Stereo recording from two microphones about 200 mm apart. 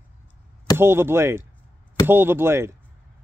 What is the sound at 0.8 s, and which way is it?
Speech, 10° right (ahead or behind).